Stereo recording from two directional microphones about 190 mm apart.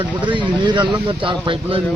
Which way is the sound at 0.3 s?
25° right (ahead or behind).